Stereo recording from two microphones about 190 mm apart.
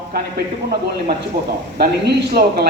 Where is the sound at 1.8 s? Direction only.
55° right (ahead or behind).